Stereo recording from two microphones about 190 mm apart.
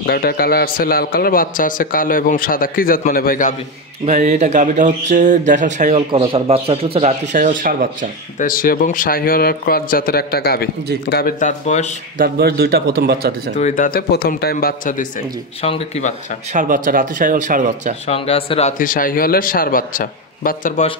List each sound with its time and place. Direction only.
0.0 s a man's voice: 55° left (ahead or behind)
4.0 s speech: 35° right (ahead or behind)
8.4 s a man's voice: 50° left (ahead or behind)
12.2 s speech: 55° right (ahead or behind)
13.6 s a man's voice: 40° left (ahead or behind)
15.6 s speech: 30° left (ahead or behind)
16.5 s speech: 45° right (ahead or behind)
18.0 s a man's voice: 30° left (ahead or behind)